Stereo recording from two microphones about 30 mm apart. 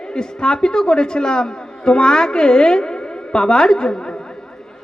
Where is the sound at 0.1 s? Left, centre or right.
Left.